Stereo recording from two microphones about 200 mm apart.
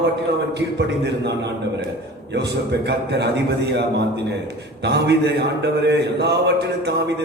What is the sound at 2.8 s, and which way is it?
A man's voice, 55° right (ahead or behind).